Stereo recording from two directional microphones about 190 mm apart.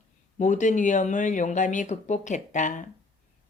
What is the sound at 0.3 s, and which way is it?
Speech, 40° left (ahead or behind).